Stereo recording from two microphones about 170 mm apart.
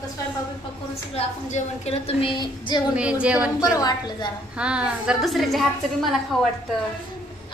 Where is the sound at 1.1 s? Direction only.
35° left (ahead or behind).